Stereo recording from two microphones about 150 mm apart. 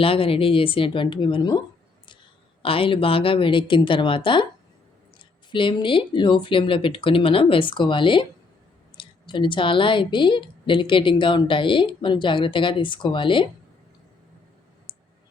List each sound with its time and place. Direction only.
0.0 s a woman's voice: 40° left (ahead or behind)
5.5 s a woman's voice: 35° left (ahead or behind)
14.9 s clicking: 35° left (ahead or behind)